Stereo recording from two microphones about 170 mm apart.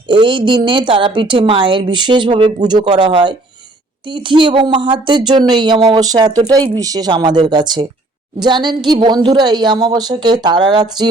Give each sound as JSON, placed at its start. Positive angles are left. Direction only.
{"t": 0.1, "sound": "speech", "side_deg": -30}